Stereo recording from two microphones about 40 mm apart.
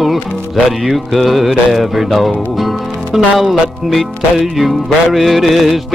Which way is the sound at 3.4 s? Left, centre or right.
Centre.